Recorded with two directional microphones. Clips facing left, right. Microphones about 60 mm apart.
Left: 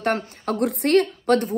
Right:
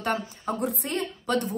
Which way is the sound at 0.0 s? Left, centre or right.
Left.